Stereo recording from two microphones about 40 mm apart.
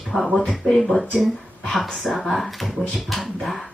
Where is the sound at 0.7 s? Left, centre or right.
Centre.